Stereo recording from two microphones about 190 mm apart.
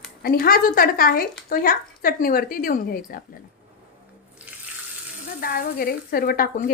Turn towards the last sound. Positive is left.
turn(degrees=50)  # may be behind; listen again after turning